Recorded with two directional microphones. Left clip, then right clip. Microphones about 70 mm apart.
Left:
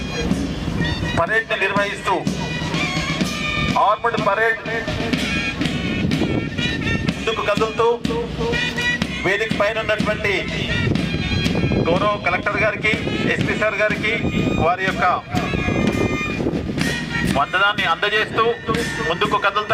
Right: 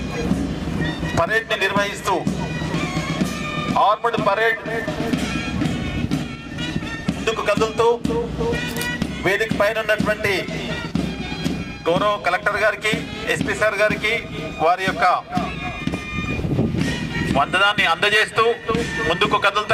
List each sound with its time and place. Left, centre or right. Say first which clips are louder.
1.1 s speech: even; right
3.8 s speech: right 1 dB; right
7.6 s speech: right 1 dB; right
8.0 s speech: even; left
9.2 s a man's voice: right 1 dB; right
11.9 s a man's voice: right 2 dB; right
15.4 s music: left 4 dB; left
17.3 s speech: right 1 dB; right